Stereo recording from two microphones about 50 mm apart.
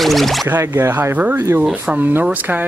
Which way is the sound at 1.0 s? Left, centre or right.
Right.